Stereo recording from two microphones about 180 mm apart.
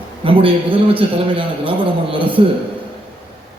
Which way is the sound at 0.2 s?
30° right (ahead or behind).